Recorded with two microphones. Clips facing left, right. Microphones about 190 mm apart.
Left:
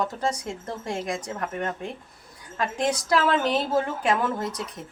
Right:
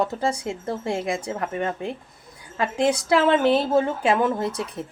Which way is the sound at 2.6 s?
25° right (ahead or behind).